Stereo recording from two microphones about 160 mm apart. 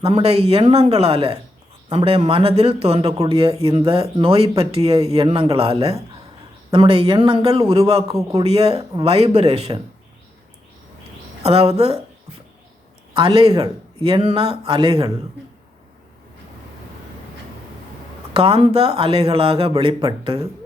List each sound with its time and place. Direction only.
0.0 s speech: 35° right (ahead or behind)
8.8 s speech: 25° right (ahead or behind)
9.0 s speech: 40° right (ahead or behind)
11.4 s speech: 40° right (ahead or behind)
18.3 s speech: 35° right (ahead or behind)